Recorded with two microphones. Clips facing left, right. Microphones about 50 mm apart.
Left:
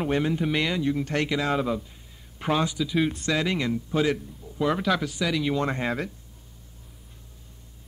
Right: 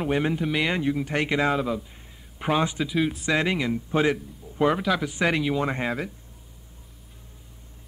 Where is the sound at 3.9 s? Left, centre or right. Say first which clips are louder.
Right 2 dB; right.